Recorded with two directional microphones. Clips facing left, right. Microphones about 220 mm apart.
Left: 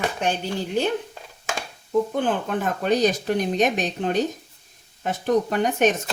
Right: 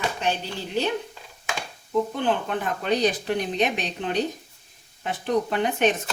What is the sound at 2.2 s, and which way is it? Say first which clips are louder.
Speech: left 2 dB; 45° left (ahead or behind).